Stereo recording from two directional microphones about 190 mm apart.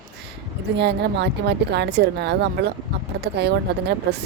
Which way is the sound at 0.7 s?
65° right (ahead or behind).